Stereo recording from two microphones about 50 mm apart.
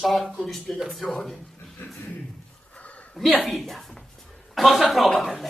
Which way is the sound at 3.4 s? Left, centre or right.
Centre.